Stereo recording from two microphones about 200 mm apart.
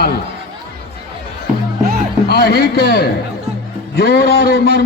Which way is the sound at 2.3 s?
50° left (ahead or behind).